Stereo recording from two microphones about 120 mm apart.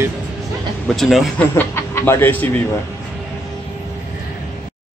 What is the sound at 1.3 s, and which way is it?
Speech, 20° left (ahead or behind).